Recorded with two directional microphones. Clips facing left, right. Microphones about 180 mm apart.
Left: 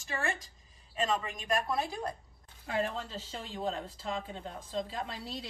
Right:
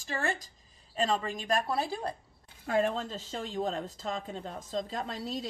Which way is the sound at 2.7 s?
45° right (ahead or behind).